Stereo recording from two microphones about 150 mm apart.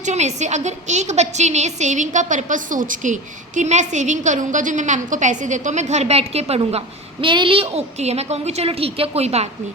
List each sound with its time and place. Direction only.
0.0 s a woman's voice: 50° right (ahead or behind)